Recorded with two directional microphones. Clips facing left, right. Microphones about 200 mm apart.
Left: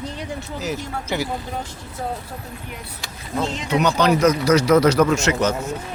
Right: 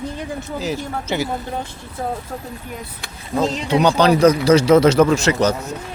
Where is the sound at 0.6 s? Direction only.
25° right (ahead or behind).